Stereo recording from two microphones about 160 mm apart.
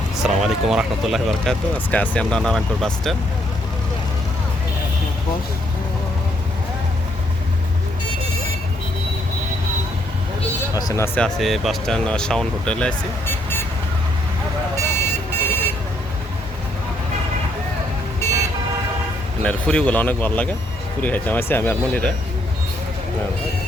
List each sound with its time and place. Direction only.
0.2 s speech: 5° right (ahead or behind)
10.8 s speech: 20° left (ahead or behind)
11.3 s speech: centre (ahead or behind)
14.8 s car alarm: 15° left (ahead or behind)
19.4 s speech: 5° left (ahead or behind)